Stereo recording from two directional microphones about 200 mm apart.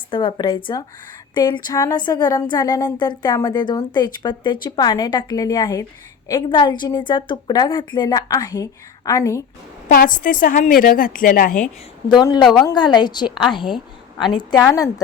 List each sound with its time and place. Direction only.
0.1 s speech: 25° left (ahead or behind)
9.9 s a woman's voice: 45° left (ahead or behind)
12.4 s a woman's voice: centre (ahead or behind)
12.6 s a woman's voice: 20° left (ahead or behind)